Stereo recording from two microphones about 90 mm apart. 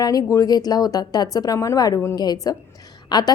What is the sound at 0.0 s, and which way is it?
A woman's voice, 45° left (ahead or behind).